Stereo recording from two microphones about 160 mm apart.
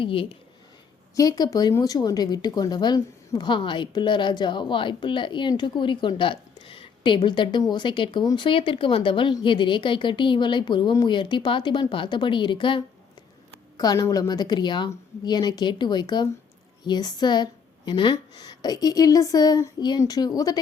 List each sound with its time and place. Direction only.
0.0 s a woman's voice: 35° left (ahead or behind)
1.1 s a woman's voice: 25° left (ahead or behind)